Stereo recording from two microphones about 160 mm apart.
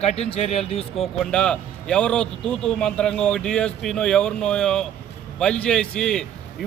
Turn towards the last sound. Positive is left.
turn(degrees=5)  # may be behind; listen again after turning